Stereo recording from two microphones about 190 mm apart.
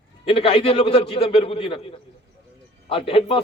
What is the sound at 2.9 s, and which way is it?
Speech, 30° left (ahead or behind).